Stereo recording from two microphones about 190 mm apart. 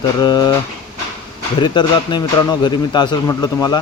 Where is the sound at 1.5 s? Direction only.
25° left (ahead or behind).